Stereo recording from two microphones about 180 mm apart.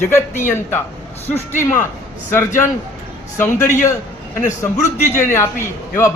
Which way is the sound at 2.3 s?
15° left (ahead or behind).